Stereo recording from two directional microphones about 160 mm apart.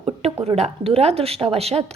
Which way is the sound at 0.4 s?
40° right (ahead or behind).